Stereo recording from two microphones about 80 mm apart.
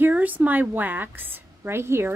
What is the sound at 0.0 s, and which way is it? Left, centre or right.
A woman's voice, right.